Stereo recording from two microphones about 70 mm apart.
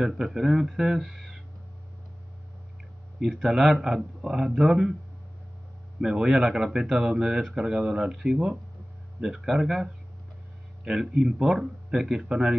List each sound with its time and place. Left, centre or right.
0.0 s speech: centre
3.2 s speech: centre
5.9 s speech: centre